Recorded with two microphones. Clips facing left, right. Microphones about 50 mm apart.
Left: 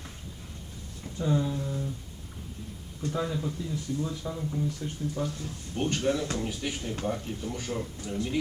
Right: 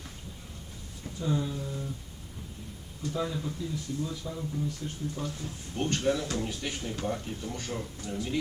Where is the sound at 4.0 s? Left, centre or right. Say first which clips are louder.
Left 2 dB; left.